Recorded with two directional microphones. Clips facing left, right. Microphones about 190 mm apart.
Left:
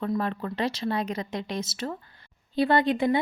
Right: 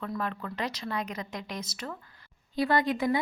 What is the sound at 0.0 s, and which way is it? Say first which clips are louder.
A woman's voice: left 6 dB; 30° left (ahead or behind).